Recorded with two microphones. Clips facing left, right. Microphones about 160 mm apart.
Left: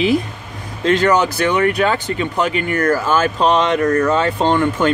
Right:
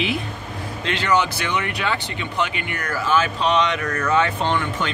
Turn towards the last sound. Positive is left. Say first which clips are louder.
# left 8 dB
turn(degrees=45)  # may be behind; listen again after turning